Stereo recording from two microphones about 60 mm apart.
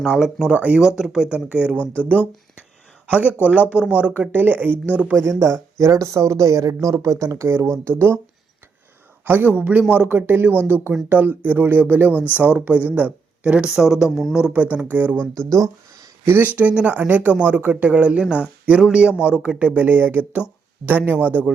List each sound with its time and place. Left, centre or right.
0.0 s speech: centre
0.5 s speech: right
0.8 s speech: centre
1.8 s speech: left
3.1 s speech: right
5.1 s speech: right
9.2 s speech: right
12.1 s speech: left
12.4 s speech: right; by 14.3 s centre
14.5 s speech: right
15.4 s a sound: right
16.6 s speech: right